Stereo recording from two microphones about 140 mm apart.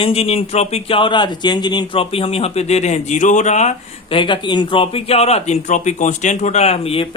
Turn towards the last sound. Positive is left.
turn(degrees=45)  # may be behind; listen again after turning